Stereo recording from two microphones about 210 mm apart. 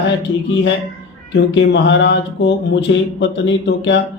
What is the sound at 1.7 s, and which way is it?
A man's voice, 55° left (ahead or behind).